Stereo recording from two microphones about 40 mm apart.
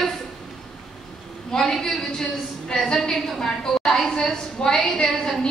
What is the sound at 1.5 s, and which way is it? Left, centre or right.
A woman's voice, centre.